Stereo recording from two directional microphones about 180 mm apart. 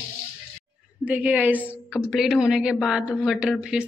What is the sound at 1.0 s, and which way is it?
A woman's voice, 5° right (ahead or behind).